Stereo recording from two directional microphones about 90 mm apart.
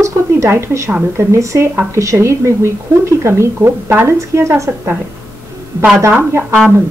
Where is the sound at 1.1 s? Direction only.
30° right (ahead or behind).